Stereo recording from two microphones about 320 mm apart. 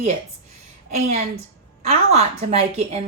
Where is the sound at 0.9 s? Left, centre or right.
Right.